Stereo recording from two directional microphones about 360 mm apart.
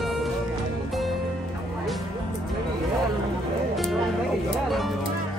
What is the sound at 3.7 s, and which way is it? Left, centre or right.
Music, centre.